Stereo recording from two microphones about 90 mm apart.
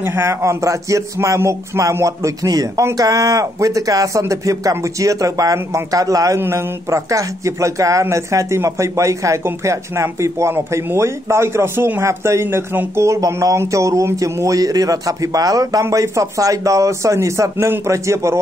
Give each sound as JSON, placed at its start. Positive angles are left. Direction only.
{"t": 0.0, "sound": "speech", "side_deg": -25}